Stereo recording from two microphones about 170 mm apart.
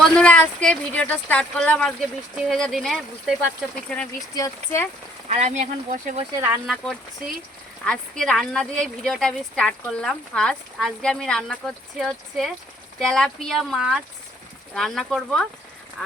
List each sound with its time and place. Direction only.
0.0 s speech: 5° left (ahead or behind)
4.4 s speech: 15° left (ahead or behind)
5.3 s speech: 45° right (ahead or behind)
7.9 s speech: 5° left (ahead or behind)